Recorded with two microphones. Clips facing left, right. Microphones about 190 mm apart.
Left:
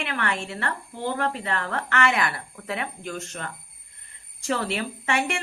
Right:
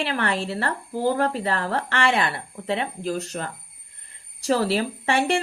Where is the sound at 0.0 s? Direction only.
35° right (ahead or behind).